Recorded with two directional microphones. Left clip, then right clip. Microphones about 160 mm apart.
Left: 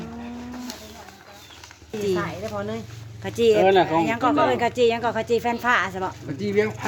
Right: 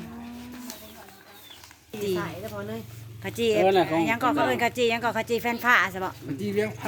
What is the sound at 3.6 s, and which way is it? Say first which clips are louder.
Speech: left 2 dB; 50° right (ahead or behind).